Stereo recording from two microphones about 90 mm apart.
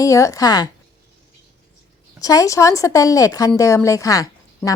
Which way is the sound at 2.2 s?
40° left (ahead or behind).